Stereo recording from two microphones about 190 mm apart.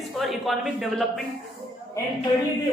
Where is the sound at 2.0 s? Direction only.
15° left (ahead or behind).